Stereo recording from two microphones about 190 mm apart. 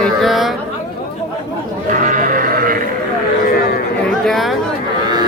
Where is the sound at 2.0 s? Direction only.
45° right (ahead or behind).